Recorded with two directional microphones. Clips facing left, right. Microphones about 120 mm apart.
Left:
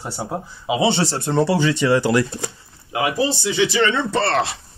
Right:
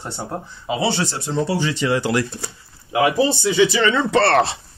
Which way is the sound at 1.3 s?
75° left (ahead or behind).